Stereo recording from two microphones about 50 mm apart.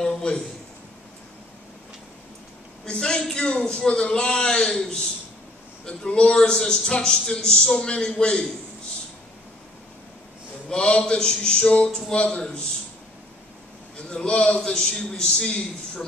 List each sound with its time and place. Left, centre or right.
0.0 s a sound: centre
2.8 s a man's voice: centre
10.7 s a man's voice: centre
14.1 s a man's voice: centre